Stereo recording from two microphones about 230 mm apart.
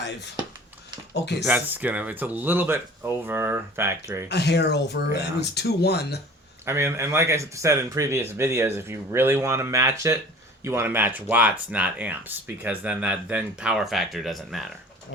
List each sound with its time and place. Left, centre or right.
0.0 s speech: left
1.5 s speech: centre
4.3 s speech: left
6.7 s speech: centre